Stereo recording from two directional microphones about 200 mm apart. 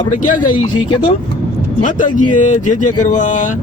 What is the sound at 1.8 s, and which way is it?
Speech, 40° left (ahead or behind).